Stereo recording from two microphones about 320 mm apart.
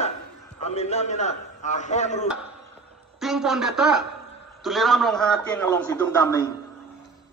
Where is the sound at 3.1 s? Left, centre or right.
Centre.